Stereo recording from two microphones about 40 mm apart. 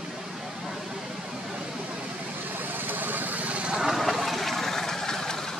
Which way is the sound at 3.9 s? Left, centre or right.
Centre.